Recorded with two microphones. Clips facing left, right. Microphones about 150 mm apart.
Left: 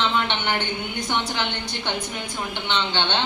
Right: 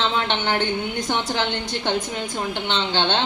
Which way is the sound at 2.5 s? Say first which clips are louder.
Even; 35° right (ahead or behind).